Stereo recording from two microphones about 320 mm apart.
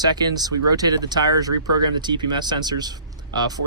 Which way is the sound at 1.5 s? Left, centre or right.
Right.